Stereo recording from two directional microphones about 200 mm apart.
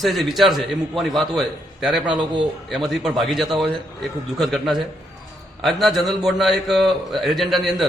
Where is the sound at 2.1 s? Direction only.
25° right (ahead or behind).